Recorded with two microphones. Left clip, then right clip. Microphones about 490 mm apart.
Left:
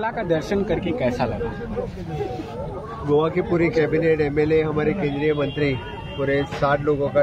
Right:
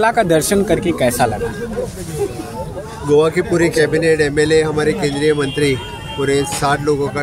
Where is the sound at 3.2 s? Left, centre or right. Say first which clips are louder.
Right 7 dB; left.